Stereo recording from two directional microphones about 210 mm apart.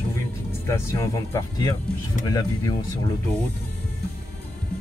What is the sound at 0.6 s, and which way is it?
Speech, 15° left (ahead or behind).